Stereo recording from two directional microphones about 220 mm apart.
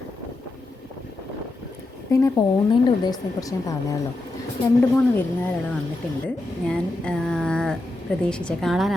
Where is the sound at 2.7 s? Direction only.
15° left (ahead or behind).